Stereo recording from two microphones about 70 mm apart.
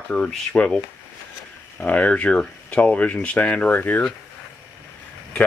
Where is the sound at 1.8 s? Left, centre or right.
Left.